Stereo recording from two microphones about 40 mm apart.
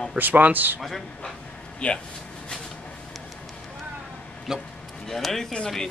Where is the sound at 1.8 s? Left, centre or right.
Left.